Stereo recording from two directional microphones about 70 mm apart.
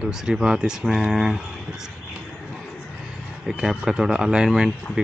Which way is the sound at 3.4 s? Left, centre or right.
Centre.